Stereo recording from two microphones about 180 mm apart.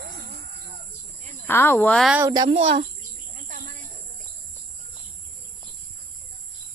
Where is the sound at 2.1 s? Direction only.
15° right (ahead or behind).